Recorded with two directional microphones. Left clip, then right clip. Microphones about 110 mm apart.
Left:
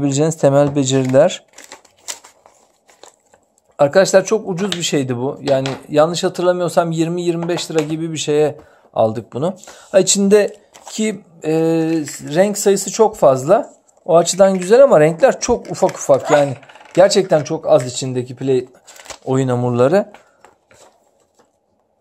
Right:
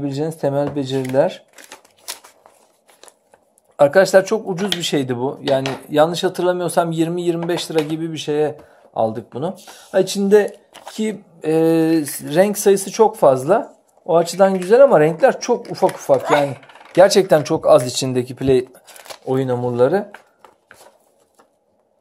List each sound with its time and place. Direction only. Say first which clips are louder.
0.0 s speech: left 7 dB; 85° left
1.5 s crumpling: left 2 dB; 5° left (ahead or behind)
3.7 s speech: even; 15° left (ahead or behind)
8.1 s speech: left 4 dB; 35° left (ahead or behind)
11.4 s speech: even; centre (ahead or behind)
11.7 s speech: right 1 dB; 15° right (ahead or behind)
12.5 s speech: even; 5° left (ahead or behind); by 15.3 s 20° left (ahead or behind)
15.3 s speech: left 2 dB; 30° left (ahead or behind)
16.2 s speech: left 3 dB; 20° right (ahead or behind)
16.9 s speech: even; centre (ahead or behind)
17.3 s speech: right 1 dB; 35° right (ahead or behind)
18.7 s shuffling cards: left 1 dB; 5° right (ahead or behind)
19.2 s speech: left 2 dB; 40° left (ahead or behind); by 20.1 s 55° left (ahead or behind)